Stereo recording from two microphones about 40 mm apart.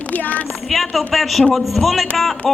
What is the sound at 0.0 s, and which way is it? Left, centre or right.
Speech, left.